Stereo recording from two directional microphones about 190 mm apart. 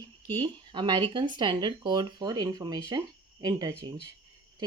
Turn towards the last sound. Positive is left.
turn(degrees=-20)  # may be behind; listen again after turning